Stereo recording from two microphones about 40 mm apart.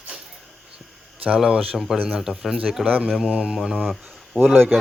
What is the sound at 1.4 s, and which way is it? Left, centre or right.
A man's voice, centre.